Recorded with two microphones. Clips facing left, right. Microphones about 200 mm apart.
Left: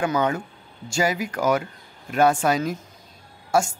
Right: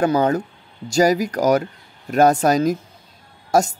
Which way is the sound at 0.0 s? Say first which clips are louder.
Right 5 dB; 40° right (ahead or behind).